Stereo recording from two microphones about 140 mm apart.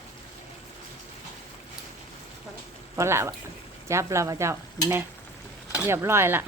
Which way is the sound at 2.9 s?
20° right (ahead or behind).